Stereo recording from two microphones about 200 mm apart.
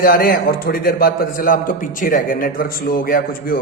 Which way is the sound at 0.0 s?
45° left (ahead or behind).